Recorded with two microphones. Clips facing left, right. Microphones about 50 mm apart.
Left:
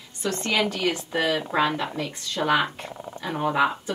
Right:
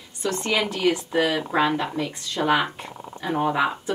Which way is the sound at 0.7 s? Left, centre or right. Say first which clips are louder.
Right 3 dB; right.